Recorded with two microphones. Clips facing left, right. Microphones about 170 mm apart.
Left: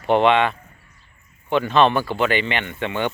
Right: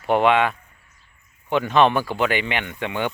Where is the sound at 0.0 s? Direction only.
5° right (ahead or behind).